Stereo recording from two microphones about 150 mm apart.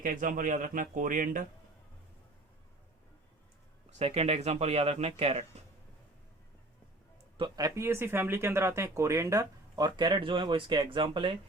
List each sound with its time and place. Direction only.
0.0 s speech: 65° right (ahead or behind)
3.9 s speech: 45° right (ahead or behind)
7.3 s speech: 30° right (ahead or behind)